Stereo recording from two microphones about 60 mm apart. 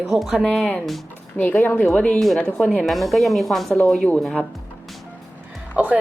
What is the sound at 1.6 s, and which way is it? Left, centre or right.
Speech, left.